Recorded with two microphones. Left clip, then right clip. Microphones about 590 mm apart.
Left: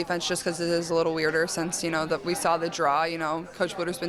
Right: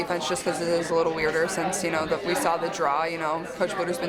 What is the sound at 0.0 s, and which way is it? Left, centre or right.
Speech, left.